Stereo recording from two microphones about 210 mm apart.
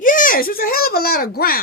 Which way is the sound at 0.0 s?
40° left (ahead or behind).